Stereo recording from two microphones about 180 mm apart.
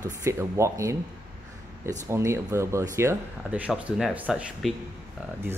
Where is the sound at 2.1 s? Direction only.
15° right (ahead or behind).